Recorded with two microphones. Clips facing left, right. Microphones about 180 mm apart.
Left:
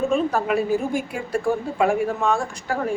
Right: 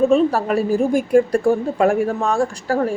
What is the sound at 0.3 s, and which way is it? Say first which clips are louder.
A woman's voice: right 3 dB; 35° right (ahead or behind).